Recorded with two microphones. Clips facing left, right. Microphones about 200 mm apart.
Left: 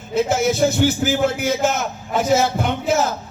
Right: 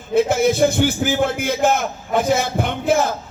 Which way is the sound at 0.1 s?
55° right (ahead or behind).